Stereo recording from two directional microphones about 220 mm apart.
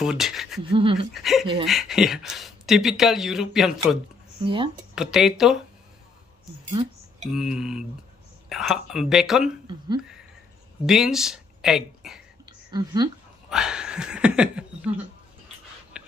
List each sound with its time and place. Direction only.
0.0 s speech: centre (ahead or behind)
0.7 s speech: 25° right (ahead or behind)
1.1 s speech: centre (ahead or behind)
4.4 s speech: 20° right (ahead or behind)
4.9 s speech: centre (ahead or behind)
6.8 s speech: 25° right (ahead or behind)
7.2 s speech: centre (ahead or behind)
10.9 s speech: centre (ahead or behind)
12.4 s a sound: 20° right (ahead or behind)
13.5 s speech: 5° right (ahead or behind)
15.9 s whispering: 5° right (ahead or behind)